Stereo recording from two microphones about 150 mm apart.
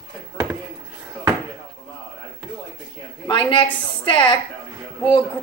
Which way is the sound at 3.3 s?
35° left (ahead or behind).